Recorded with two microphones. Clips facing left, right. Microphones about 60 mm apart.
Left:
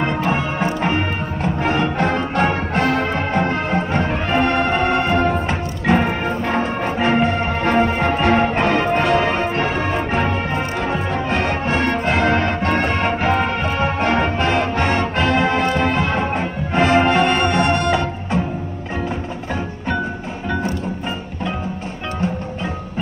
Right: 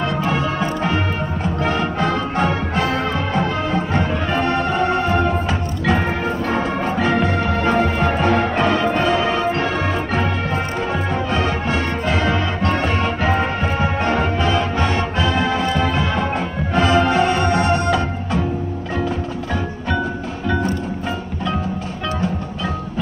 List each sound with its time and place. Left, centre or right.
0.3 s music: left
2.0 s music: left
8.0 s music: left
8.4 s music: left
9.0 s music: left
10.5 s music: left
11.3 s music: left